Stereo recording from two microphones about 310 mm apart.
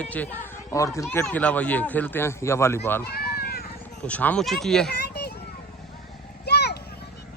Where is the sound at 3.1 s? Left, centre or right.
Left.